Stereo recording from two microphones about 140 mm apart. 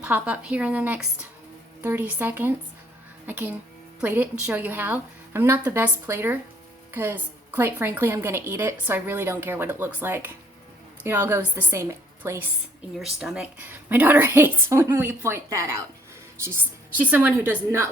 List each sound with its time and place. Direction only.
0.0 s a woman's voice: 10° right (ahead or behind)
13.1 s a woman's voice: 5° right (ahead or behind); by 15.8 s 20° right (ahead or behind)
17.0 s a woman's voice: 15° right (ahead or behind)